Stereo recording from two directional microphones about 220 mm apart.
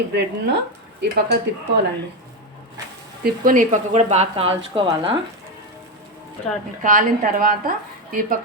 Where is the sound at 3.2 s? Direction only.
40° right (ahead or behind); by 5.1 s 20° right (ahead or behind).